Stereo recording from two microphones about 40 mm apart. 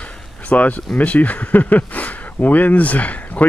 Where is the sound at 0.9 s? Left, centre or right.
Left.